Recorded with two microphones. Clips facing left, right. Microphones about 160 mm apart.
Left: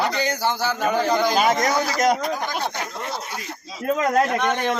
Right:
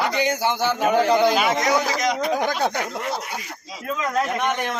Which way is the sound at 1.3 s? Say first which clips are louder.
Left 2 dB; 40° left (ahead or behind).